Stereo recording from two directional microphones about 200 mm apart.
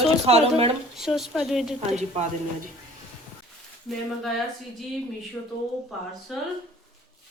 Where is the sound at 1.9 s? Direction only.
35° right (ahead or behind).